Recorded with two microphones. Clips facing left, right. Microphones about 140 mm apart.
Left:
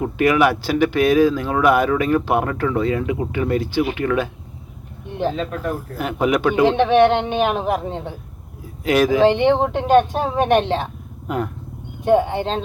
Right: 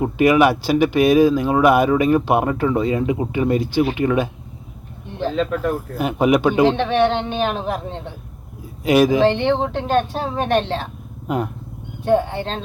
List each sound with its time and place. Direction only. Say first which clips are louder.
0.0 s speech: right 2 dB; 20° right (ahead or behind)
6.0 s speech: right 3 dB; 15° right (ahead or behind)
6.7 s speech: left 3 dB; 15° left (ahead or behind)
8.8 s speech: right 2 dB; 15° right (ahead or behind)
9.2 s speech: left 2 dB; 10° left (ahead or behind)
11.3 s speech: right 1 dB; 20° right (ahead or behind)
12.0 s speech: left 2 dB; 15° left (ahead or behind)